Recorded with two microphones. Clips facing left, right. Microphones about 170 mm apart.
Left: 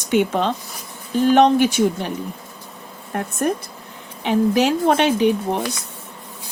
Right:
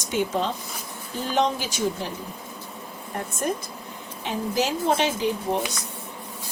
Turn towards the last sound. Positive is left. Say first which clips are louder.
# left 7 dB
turn(degrees=65)  # may be behind; listen again after turning